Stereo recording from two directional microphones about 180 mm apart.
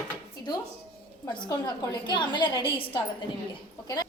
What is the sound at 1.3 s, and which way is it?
A woman's voice, 25° left (ahead or behind).